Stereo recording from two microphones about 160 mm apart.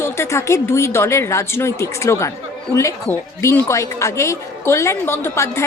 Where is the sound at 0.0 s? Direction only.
15° left (ahead or behind).